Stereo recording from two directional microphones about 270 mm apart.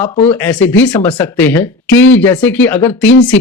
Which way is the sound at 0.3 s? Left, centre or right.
Centre.